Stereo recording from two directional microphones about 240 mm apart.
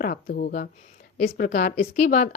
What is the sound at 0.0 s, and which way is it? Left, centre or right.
A woman's voice, left.